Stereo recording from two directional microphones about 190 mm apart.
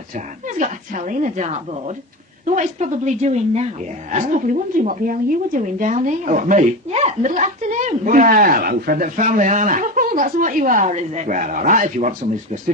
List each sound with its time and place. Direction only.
0.4 s a woman's voice: 40° right (ahead or behind)